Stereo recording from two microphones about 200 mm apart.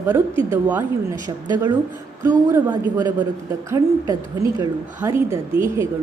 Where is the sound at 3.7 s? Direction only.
15° right (ahead or behind).